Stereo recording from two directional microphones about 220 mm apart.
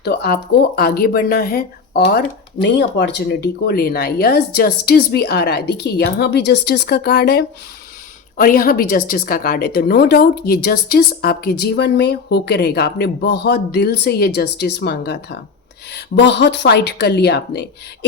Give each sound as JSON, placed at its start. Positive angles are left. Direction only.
{"t": 0.0, "sound": "a woman's voice", "side_deg": 50}